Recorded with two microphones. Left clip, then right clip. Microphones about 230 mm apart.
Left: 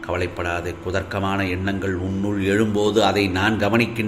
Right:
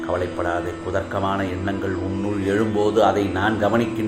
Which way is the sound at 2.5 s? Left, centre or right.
Left.